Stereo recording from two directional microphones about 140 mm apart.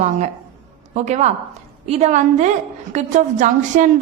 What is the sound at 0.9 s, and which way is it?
A woman's voice, 55° right (ahead or behind).